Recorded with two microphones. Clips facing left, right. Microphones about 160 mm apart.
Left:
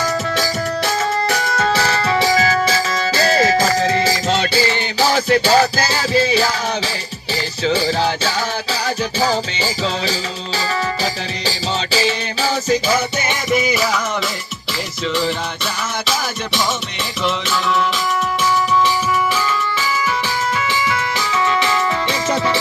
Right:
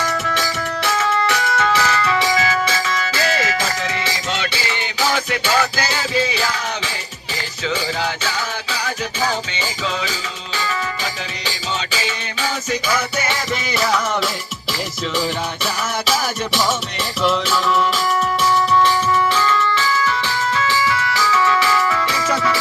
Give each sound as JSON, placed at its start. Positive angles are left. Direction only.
{"t": 0.0, "sound": "music", "side_deg": 35}
{"t": 15.1, "sound": "music", "side_deg": -10}